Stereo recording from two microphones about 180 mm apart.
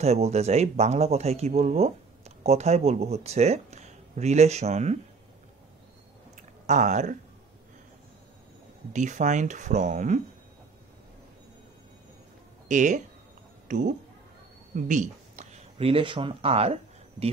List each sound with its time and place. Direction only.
0.0 s speech: 35° right (ahead or behind)
6.6 s speech: 40° right (ahead or behind)
8.9 s speech: 45° right (ahead or behind)
12.6 s speech: 45° right (ahead or behind)